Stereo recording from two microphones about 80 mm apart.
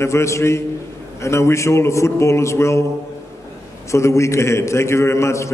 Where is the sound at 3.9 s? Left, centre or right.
Left.